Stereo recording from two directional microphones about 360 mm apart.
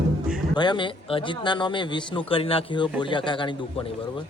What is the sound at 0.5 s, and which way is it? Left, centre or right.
A man's voice, centre.